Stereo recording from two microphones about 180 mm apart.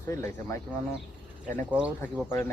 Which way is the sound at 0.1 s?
15° left (ahead or behind).